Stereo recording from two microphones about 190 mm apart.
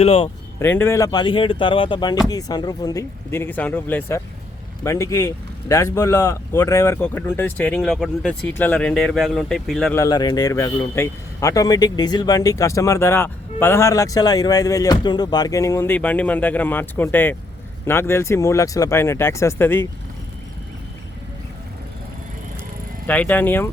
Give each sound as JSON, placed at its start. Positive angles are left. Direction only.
{"t": 0.0, "sound": "speech", "side_deg": 30}
{"t": 0.6, "sound": "a man's voice", "side_deg": 10}
{"t": 9.9, "sound": "a man's voice", "side_deg": 20}
{"t": 23.0, "sound": "a man's voice", "side_deg": 10}